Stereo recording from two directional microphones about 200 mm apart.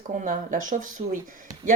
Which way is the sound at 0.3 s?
40° right (ahead or behind).